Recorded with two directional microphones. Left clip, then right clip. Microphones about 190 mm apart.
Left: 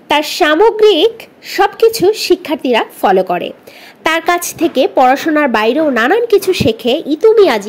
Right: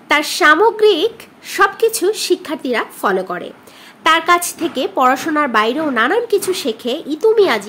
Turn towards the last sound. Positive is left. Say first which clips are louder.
# left 5 dB
turn(degrees=25)  # may be behind; listen again after turning